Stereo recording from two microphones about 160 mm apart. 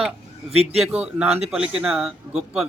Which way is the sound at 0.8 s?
5° right (ahead or behind).